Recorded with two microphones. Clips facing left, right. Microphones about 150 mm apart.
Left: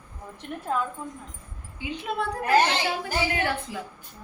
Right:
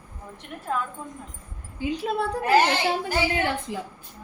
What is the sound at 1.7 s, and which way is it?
Speech, 35° right (ahead or behind).